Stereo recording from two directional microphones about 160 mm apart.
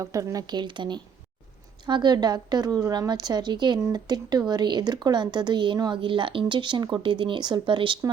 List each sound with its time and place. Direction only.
0.0 s a woman's voice: 20° right (ahead or behind)